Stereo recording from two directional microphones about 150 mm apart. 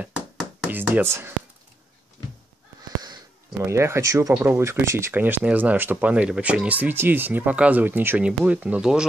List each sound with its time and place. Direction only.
0.7 s speech: 10° right (ahead or behind)
3.6 s speech: 20° right (ahead or behind)